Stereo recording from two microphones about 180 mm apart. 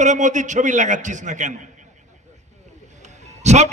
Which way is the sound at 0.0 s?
40° right (ahead or behind).